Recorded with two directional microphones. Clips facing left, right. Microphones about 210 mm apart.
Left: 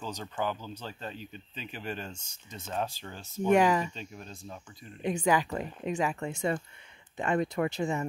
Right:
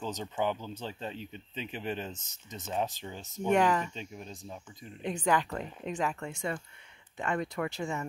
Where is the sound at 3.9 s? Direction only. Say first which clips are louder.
Right 1 dB; 15° right (ahead or behind).